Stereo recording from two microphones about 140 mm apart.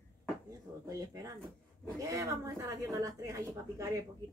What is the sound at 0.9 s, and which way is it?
Speech, 25° right (ahead or behind).